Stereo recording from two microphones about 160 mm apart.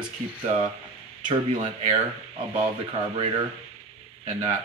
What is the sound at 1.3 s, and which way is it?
Speech, 35° right (ahead or behind).